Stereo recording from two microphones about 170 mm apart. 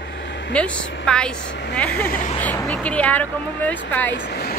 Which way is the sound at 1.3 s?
90° left.